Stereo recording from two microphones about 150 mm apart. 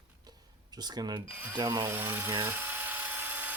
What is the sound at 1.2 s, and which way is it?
Speech, 10° right (ahead or behind).